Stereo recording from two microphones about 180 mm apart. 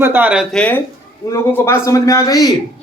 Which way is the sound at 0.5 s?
5° left (ahead or behind).